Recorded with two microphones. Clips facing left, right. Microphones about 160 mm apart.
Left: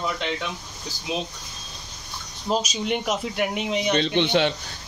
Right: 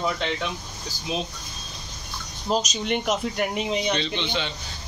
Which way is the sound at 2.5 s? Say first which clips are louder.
Even; centre (ahead or behind).